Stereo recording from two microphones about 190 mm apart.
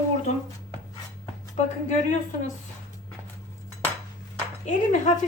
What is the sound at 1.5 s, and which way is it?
Speech, 40° left (ahead or behind).